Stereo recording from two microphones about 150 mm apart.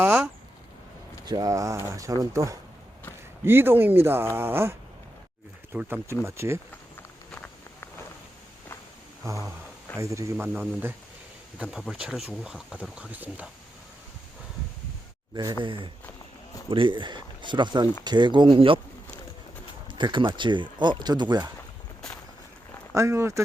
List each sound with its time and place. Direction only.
0.0 s speech: 10° right (ahead or behind)
1.2 s speech: 25° right (ahead or behind)
7.3 s a sound: 5° left (ahead or behind)
9.2 s speech: 20° right (ahead or behind)
10.3 s speech: 10° right (ahead or behind)
15.6 s speech: 35° right (ahead or behind)
19.9 s speech: 30° right (ahead or behind)
23.0 s speech: 20° right (ahead or behind)